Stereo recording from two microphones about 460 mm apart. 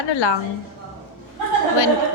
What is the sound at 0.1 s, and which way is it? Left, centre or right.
Speech, left.